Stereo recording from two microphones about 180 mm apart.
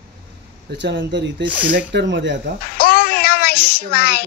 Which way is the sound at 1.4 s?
10° right (ahead or behind).